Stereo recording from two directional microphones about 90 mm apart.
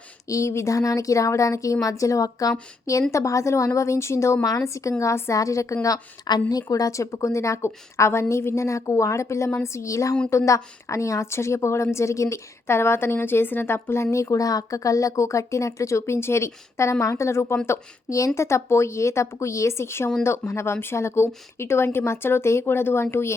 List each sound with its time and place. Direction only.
0.3 s a woman's voice: 35° left (ahead or behind)